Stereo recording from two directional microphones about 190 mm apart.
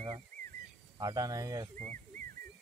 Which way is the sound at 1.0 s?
20° right (ahead or behind).